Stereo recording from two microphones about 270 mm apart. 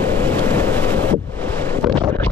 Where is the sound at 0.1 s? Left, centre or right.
Centre.